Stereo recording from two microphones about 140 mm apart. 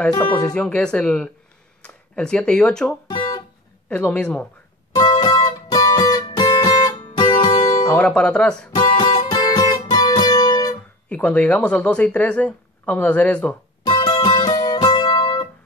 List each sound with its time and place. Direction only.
0.2 s speech: 20° left (ahead or behind)
0.6 s speech: 5° left (ahead or behind)
5.1 s music: 35° left (ahead or behind)
7.9 s speech: 10° left (ahead or behind)
8.7 s music: 25° left (ahead or behind)
11.1 s speech: 10° left (ahead or behind)
13.8 s music: 30° left (ahead or behind)